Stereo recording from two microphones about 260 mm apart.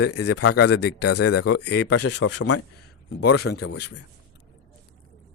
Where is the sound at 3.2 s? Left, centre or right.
Left.